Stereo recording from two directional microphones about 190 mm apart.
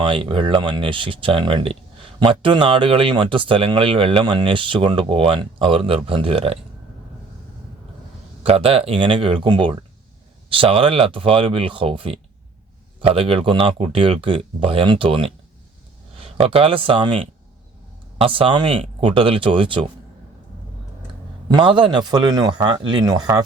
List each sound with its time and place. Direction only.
0.0 s speech: 25° right (ahead or behind)
8.4 s speech: 30° right (ahead or behind)
16.4 s speech: 30° right (ahead or behind)
21.5 s speech: 25° right (ahead or behind)